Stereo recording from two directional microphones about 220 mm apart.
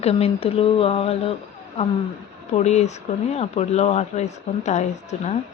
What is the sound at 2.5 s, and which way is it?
A woman's voice, 30° left (ahead or behind).